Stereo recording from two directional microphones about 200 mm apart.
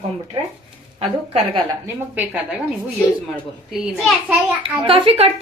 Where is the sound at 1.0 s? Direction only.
25° right (ahead or behind).